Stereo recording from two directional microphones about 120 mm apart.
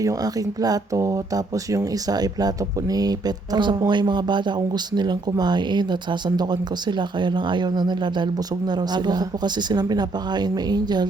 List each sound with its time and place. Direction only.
0.0 s speech: 30° right (ahead or behind)